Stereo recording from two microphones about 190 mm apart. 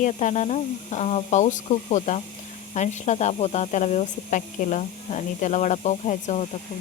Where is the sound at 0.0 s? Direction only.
40° left (ahead or behind).